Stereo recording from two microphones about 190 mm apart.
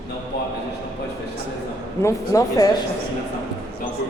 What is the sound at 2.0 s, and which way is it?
Speech, 15° left (ahead or behind).